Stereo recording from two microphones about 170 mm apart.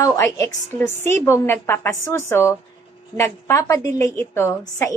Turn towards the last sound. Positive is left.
turn(degrees=15)  # may be behind; listen again after turning